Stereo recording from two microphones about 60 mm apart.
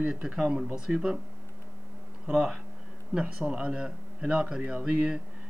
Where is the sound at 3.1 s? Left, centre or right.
Centre.